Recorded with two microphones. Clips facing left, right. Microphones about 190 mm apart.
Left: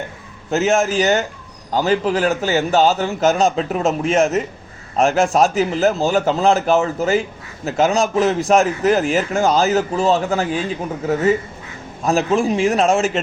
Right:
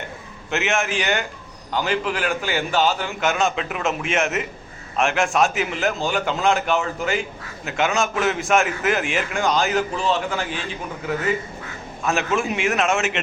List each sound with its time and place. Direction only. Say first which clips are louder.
0.5 s a man's voice: left 7 dB; 35° left (ahead or behind)